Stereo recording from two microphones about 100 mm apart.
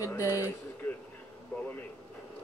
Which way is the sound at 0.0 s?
30° left (ahead or behind).